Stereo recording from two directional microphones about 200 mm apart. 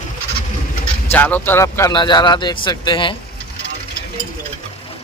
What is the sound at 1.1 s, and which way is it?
A man's voice, 10° left (ahead or behind).